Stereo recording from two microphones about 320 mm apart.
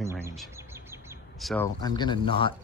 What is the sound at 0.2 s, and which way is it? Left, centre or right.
Chirp, centre.